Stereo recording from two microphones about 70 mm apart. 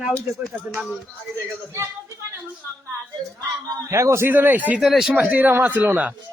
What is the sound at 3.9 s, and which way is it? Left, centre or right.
Speech, right.